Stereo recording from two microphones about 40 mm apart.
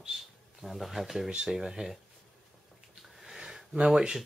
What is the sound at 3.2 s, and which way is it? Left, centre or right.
Sniff, centre.